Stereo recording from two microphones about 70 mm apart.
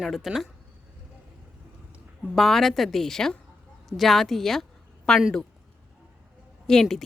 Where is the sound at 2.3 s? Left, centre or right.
Centre.